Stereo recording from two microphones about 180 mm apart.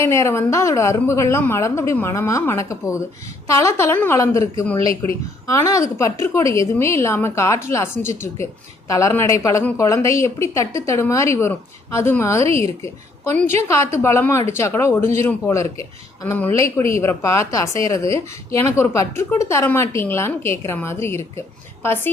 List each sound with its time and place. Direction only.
0.0 s a woman's voice: 15° left (ahead or behind)